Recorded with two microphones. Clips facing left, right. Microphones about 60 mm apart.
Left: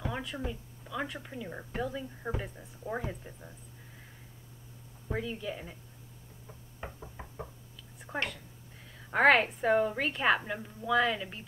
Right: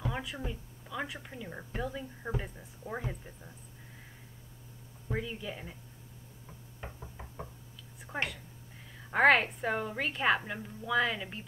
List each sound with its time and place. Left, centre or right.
0.0 s a sound: centre
0.5 s a woman's voice: centre
5.0 s a woman's voice: centre
7.2 s knock: centre
8.1 s a woman's voice: centre